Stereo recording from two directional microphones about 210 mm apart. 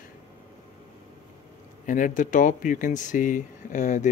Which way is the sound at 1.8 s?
40° left (ahead or behind).